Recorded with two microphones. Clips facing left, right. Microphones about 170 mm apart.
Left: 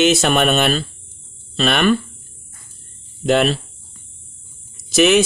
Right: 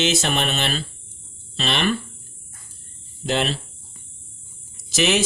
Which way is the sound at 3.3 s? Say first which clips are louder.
Left 7 dB; 55° left (ahead or behind).